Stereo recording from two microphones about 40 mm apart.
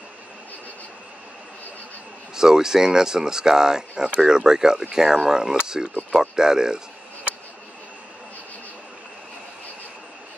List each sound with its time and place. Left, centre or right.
2.3 s speech: centre